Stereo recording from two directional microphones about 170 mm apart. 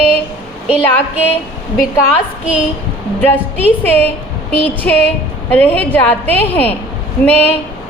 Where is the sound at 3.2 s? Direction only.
10° left (ahead or behind).